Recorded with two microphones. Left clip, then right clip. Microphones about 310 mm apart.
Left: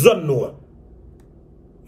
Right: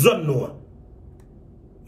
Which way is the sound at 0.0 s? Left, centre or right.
Centre.